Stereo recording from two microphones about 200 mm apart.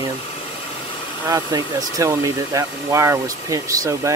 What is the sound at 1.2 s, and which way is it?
Speech, 20° right (ahead or behind).